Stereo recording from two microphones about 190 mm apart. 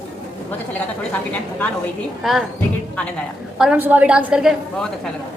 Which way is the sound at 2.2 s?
Centre (ahead or behind).